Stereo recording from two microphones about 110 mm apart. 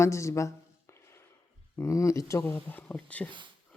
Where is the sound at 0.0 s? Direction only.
25° left (ahead or behind).